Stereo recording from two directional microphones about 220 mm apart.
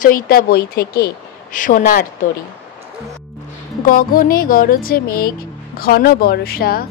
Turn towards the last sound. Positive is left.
turn(degrees=45)  # may be behind; listen again after turning